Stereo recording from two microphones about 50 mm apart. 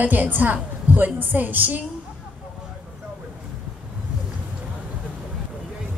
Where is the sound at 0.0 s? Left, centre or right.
Right.